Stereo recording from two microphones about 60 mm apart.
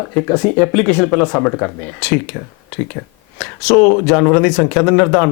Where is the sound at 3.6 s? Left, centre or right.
Centre.